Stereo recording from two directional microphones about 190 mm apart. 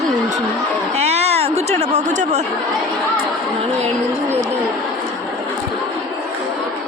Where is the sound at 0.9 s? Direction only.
35° right (ahead or behind).